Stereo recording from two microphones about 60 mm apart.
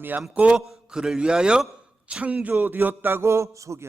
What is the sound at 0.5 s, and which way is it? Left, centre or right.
A man's voice, centre.